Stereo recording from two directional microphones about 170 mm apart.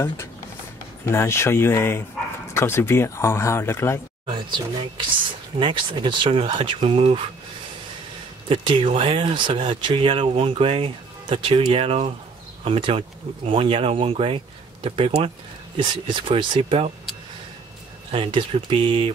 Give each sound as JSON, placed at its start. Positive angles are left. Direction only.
{"t": 1.0, "sound": "speech", "side_deg": 15}
{"t": 4.3, "sound": "speech", "side_deg": -30}
{"t": 8.5, "sound": "speech", "side_deg": -30}
{"t": 18.1, "sound": "speech", "side_deg": -30}